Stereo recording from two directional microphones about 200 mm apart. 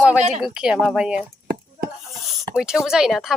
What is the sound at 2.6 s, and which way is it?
Speech, centre (ahead or behind).